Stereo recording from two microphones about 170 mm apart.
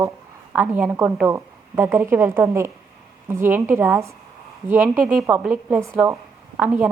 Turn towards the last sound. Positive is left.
turn(degrees=-10)  # may be behind; listen again after turning